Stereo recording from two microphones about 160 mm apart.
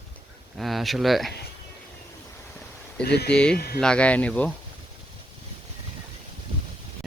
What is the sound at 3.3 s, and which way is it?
Speech, 5° left (ahead or behind).